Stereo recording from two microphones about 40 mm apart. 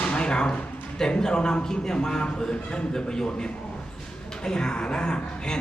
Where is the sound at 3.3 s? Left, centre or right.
Left.